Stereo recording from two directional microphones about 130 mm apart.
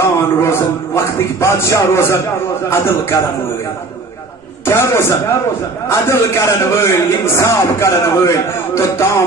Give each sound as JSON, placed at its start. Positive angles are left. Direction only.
{"t": 0.0, "sound": "music", "side_deg": 20}
{"t": 2.7, "sound": "a man's voice", "side_deg": 20}
{"t": 4.6, "sound": "a man's voice", "side_deg": 20}